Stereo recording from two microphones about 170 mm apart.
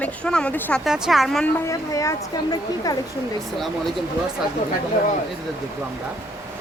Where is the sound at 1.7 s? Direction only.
20° left (ahead or behind).